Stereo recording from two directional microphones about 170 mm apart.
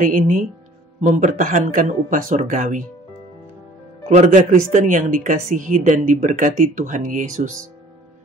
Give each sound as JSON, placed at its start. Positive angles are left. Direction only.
{"t": 0.0, "sound": "speech", "side_deg": -50}
{"t": 4.1, "sound": "speech", "side_deg": -45}